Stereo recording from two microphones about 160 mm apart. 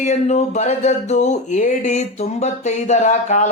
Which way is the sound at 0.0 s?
45° left (ahead or behind).